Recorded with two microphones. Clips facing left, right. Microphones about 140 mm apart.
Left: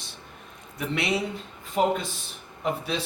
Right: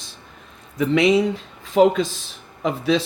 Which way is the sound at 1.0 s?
90° right.